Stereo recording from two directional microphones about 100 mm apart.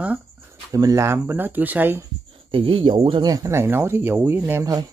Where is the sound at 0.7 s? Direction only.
35° right (ahead or behind).